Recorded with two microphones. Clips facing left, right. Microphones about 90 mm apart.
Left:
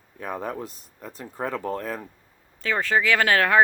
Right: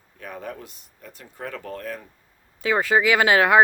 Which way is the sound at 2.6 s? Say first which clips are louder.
Right 3 dB; 10° right (ahead or behind).